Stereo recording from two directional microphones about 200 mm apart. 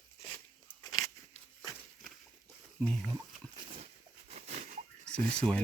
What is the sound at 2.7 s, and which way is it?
Speech, centre (ahead or behind).